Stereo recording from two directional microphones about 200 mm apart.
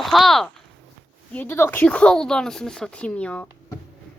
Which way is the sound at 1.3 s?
10° left (ahead or behind).